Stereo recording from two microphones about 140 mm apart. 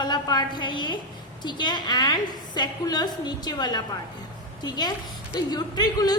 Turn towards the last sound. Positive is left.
turn(degrees=30)  # may be behind; listen again after turning